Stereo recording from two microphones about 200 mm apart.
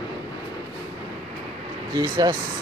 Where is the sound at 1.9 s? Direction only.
20° right (ahead or behind).